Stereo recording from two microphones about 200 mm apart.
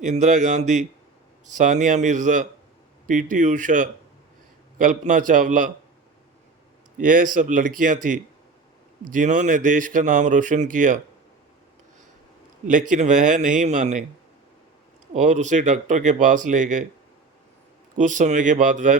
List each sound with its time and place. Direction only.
0.0 s speech: 35° right (ahead or behind)
7.0 s speech: 40° right (ahead or behind)
12.6 s speech: 40° right (ahead or behind)
15.1 s speech: 35° right (ahead or behind)
17.9 s speech: 40° right (ahead or behind)